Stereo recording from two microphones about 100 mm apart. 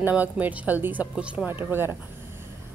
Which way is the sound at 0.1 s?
15° right (ahead or behind).